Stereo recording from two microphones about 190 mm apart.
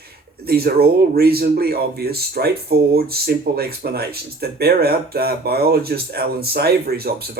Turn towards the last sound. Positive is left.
turn(degrees=-55)  # may be behind; listen again after turning